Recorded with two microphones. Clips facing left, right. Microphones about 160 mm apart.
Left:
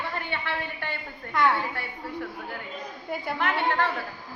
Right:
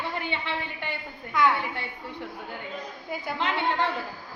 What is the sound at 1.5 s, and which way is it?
Speech, 15° right (ahead or behind).